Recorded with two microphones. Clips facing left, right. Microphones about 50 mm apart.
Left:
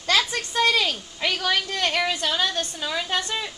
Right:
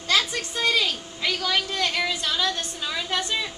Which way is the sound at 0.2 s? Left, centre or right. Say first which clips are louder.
Left 3 dB; left.